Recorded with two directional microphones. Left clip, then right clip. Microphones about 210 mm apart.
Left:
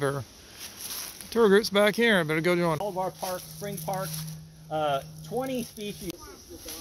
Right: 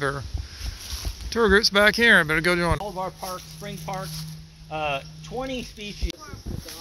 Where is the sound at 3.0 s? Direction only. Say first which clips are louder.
Even; 30° left (ahead or behind).